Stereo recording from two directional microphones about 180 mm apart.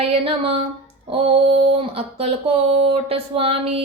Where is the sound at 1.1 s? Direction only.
30° right (ahead or behind).